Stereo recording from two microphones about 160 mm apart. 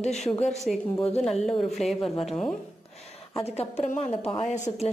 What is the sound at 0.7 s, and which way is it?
A woman's voice, 5° left (ahead or behind).